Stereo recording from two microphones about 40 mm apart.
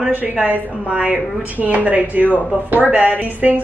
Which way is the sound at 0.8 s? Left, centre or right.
Right.